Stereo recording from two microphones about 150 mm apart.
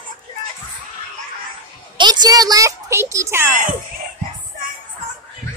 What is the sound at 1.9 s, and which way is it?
A woman's voice, 30° right (ahead or behind).